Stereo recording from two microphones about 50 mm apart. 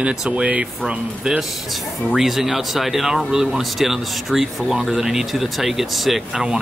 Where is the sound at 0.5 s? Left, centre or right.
Right.